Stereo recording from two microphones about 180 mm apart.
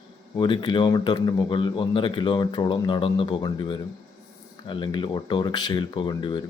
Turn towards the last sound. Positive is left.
turn(degrees=25)  # may be behind; listen again after turning